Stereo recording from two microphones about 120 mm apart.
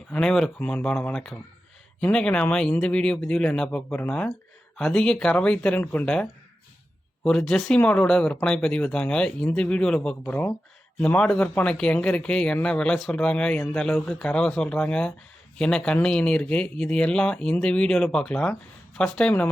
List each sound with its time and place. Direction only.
0.1 s speech: 5° left (ahead or behind)
7.3 s speech: 5° left (ahead or behind)